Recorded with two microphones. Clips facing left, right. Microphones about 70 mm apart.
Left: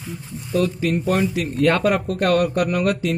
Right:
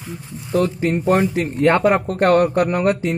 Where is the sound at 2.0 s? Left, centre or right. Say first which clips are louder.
Right 4 dB; right.